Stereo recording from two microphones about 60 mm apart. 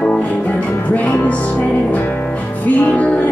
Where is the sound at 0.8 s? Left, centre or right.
Left.